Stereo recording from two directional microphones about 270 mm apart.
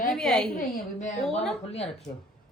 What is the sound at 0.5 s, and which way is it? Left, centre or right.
Speech, left.